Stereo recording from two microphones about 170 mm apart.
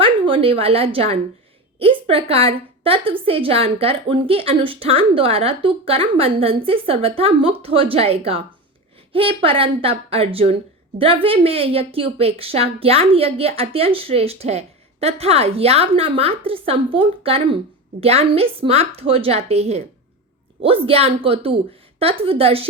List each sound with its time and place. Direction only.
0.0 s a woman's voice: 35° right (ahead or behind)